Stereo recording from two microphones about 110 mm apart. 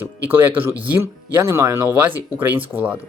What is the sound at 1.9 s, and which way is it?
Speech, 20° right (ahead or behind).